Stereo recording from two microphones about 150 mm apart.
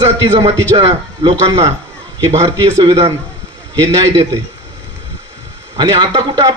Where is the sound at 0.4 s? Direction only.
40° right (ahead or behind).